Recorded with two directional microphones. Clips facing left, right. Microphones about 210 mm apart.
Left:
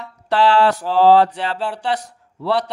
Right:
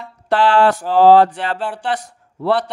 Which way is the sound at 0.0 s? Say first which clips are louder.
Right 1 dB; 50° right (ahead or behind).